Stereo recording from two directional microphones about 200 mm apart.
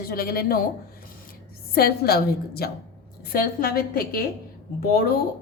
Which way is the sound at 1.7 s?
50° left (ahead or behind).